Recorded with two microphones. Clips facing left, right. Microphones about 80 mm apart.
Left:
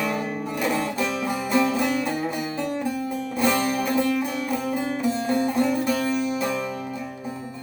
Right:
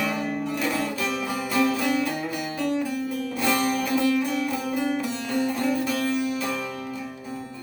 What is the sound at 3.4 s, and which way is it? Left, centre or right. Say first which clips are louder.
Music: left 2 dB; left.